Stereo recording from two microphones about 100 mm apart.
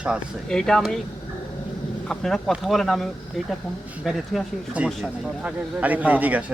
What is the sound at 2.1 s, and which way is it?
Speech, 5° left (ahead or behind).